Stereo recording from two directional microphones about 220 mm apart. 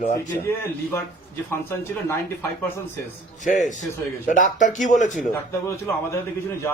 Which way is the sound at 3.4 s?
35° left (ahead or behind).